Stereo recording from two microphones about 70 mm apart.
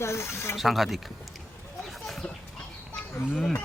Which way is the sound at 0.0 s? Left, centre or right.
Left.